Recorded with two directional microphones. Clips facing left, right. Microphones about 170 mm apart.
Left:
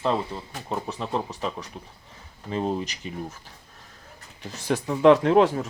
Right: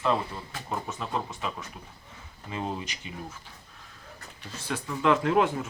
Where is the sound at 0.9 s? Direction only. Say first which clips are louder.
Left 4 dB; 35° left (ahead or behind).